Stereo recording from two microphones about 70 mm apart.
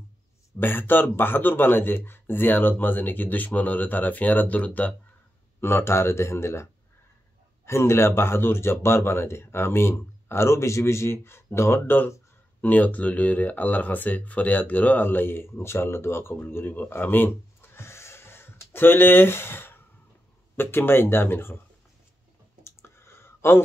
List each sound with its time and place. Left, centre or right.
0.6 s a man's voice: left
5.6 s speech: left
12.6 s speech: left
22.6 s clicking: left